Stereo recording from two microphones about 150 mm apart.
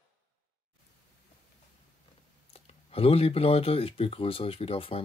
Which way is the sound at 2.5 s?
40° left (ahead or behind).